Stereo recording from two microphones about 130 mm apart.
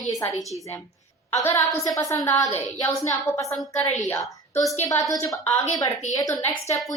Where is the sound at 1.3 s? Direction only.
25° left (ahead or behind).